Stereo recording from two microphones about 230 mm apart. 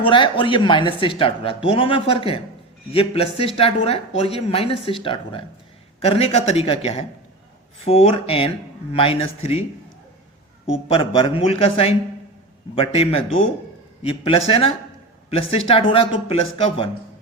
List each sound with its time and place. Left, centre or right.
0.0 s speech: left
10.8 s speech: left